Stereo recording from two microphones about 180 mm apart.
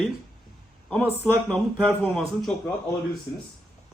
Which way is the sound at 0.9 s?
5° left (ahead or behind).